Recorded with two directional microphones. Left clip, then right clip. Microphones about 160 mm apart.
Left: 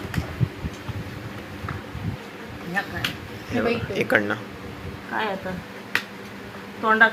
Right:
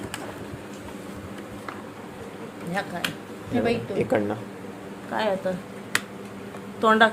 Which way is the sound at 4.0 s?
15° right (ahead or behind).